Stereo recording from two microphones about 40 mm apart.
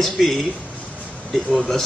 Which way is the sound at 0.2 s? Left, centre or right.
Centre.